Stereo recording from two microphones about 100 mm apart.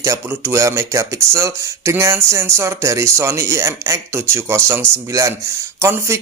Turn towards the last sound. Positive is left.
turn(degrees=-30)  # may be behind; listen again after turning